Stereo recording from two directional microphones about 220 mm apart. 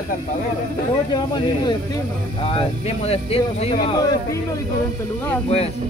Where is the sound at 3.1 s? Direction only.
25° left (ahead or behind).